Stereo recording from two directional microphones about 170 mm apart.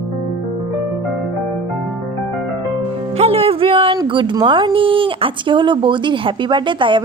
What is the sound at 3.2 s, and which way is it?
Speech, 35° right (ahead or behind).